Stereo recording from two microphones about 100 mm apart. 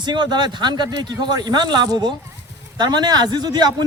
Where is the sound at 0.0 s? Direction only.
50° right (ahead or behind).